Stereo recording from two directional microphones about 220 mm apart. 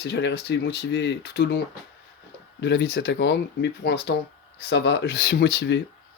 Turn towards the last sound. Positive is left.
turn(degrees=50)  # may be behind; listen again after turning